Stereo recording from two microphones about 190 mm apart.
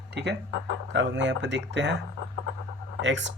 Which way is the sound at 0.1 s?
65° right (ahead or behind).